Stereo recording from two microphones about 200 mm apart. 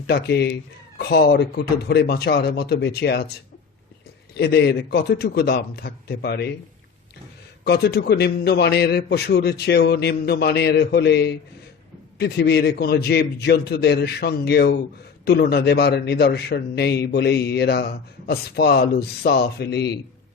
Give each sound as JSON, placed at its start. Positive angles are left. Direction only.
{"t": 0.1, "sound": "a man's voice", "side_deg": 55}
{"t": 4.4, "sound": "a man's voice", "side_deg": 55}
{"t": 7.6, "sound": "a man's voice", "side_deg": 55}